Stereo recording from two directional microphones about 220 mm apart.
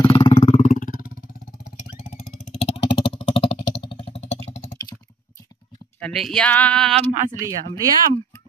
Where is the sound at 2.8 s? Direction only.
25° left (ahead or behind).